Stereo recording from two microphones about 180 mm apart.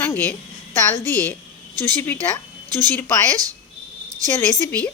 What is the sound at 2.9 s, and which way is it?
Speech, 10° left (ahead or behind).